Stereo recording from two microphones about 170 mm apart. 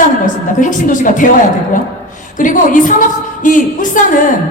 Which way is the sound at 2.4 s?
50° left (ahead or behind).